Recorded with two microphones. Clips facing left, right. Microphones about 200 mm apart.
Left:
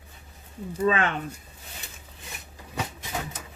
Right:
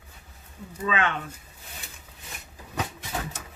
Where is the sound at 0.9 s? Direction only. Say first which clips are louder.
Left 3 dB; 40° left (ahead or behind).